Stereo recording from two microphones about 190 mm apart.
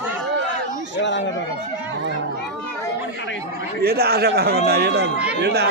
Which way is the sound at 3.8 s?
55° right (ahead or behind).